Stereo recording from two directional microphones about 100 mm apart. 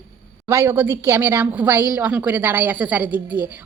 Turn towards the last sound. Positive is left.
turn(degrees=-15)  # may be behind; listen again after turning